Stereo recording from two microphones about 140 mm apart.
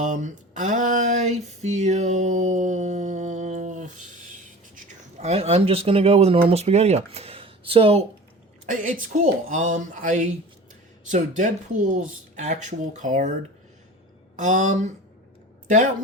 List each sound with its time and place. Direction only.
0.0 s a sound: 60° right (ahead or behind)
4.7 s speech: 55° right (ahead or behind)
8.6 s speech: 70° right (ahead or behind)
14.3 s speech: 60° right (ahead or behind)